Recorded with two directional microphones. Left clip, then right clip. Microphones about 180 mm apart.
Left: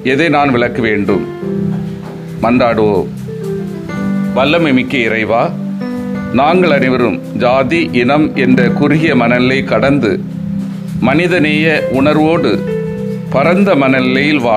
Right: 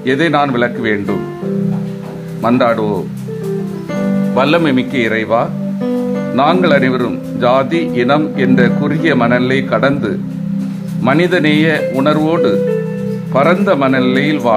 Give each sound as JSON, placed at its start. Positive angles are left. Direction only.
{"t": 0.0, "sound": "speech", "side_deg": 20}
{"t": 2.4, "sound": "speech", "side_deg": 20}
{"t": 4.3, "sound": "speech", "side_deg": 0}
{"t": 4.7, "sound": "speech", "side_deg": 20}